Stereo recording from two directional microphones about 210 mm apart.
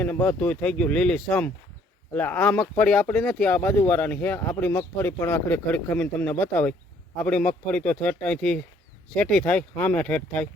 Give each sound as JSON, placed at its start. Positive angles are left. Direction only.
{"t": 0.0, "sound": "speech", "side_deg": 10}